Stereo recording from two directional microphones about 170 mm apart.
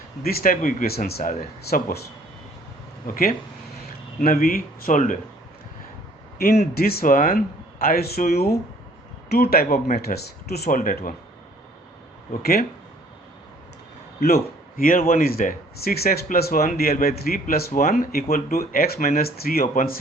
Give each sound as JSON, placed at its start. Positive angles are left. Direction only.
{"t": 0.2, "sound": "speech", "side_deg": 65}
{"t": 1.0, "sound": "speech", "side_deg": 65}
{"t": 4.2, "sound": "speech", "side_deg": 55}
{"t": 6.4, "sound": "speech", "side_deg": 65}
{"t": 12.3, "sound": "speech", "side_deg": 65}
{"t": 14.2, "sound": "a man's voice", "side_deg": 65}